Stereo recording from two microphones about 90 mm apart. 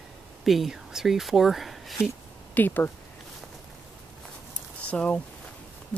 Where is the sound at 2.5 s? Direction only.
20° left (ahead or behind).